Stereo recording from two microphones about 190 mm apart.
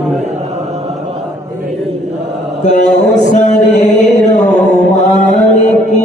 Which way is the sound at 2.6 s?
40° left (ahead or behind).